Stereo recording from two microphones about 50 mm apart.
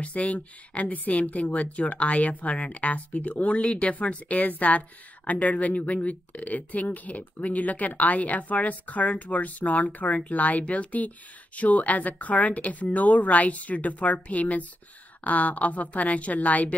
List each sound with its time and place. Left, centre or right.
0.0 s speech: left